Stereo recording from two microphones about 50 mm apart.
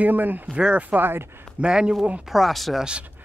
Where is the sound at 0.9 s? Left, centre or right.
Right.